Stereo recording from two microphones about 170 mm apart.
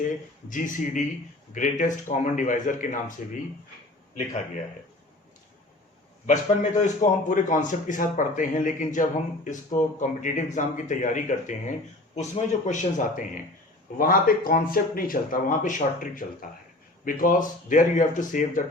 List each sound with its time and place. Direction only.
0.5 s a man's voice: 50° left (ahead or behind)
6.2 s a man's voice: 45° left (ahead or behind)